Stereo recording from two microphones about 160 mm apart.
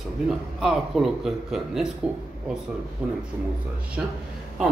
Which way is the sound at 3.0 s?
5° right (ahead or behind).